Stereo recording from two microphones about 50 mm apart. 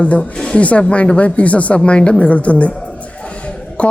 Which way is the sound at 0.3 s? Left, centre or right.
Centre.